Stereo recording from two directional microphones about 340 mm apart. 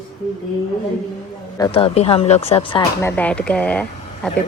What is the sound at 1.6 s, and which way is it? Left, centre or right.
A woman's voice, centre.